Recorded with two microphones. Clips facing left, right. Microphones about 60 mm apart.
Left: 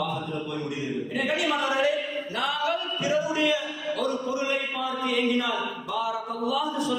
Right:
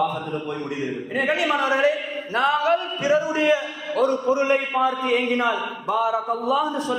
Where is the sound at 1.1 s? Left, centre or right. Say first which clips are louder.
Right 5 dB; right.